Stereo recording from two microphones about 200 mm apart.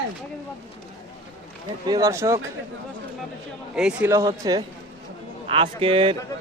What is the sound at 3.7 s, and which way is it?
A man's voice, 5° right (ahead or behind).